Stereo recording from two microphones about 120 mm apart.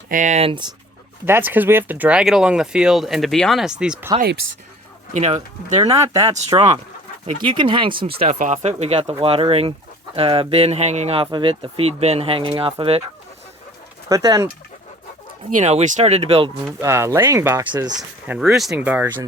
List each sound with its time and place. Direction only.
0.2 s speech: 90° right
0.4 s speech: 45° right (ahead or behind)
1.2 s speech: 15° right (ahead or behind)
5.1 s speech: 70° right (ahead or behind)
5.8 s speech: 30° right (ahead or behind); by 8.3 s 45° right (ahead or behind)
8.3 s speech: 85° right; by 12.7 s 45° right (ahead or behind)
14.1 s speech: 30° right (ahead or behind)
15.5 s speech: 80° right; by 16.5 s 55° right (ahead or behind)
16.8 s speech: 25° right (ahead or behind)
18.3 s speech: centre (ahead or behind)